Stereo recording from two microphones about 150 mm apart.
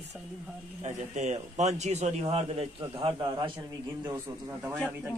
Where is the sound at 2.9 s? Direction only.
30° right (ahead or behind).